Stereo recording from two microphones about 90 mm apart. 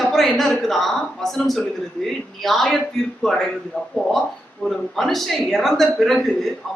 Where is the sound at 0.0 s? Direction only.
Centre (ahead or behind).